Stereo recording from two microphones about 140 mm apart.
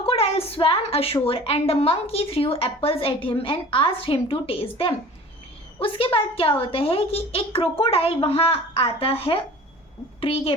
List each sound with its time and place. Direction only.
0.0 s a woman's voice: 45° left (ahead or behind)